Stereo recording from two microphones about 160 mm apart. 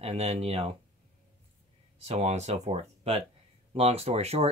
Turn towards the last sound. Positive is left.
turn(degrees=-40)  # may be behind; listen again after turning